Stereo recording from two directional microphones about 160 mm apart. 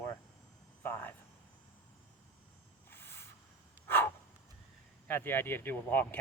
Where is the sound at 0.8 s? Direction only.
10° left (ahead or behind).